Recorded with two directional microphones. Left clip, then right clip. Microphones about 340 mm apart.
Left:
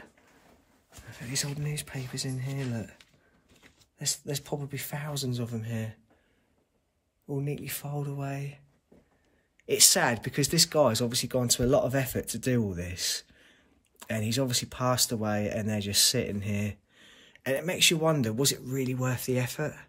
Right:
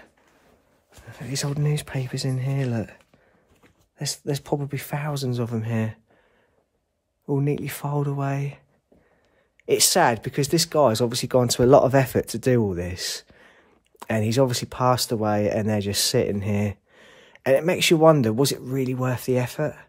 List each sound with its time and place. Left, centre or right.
1.2 s a man's voice: centre
7.2 s a man's voice: right
9.7 s speech: centre